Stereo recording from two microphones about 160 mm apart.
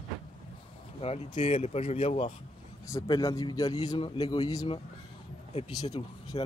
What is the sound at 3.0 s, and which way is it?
A man's voice, 25° left (ahead or behind).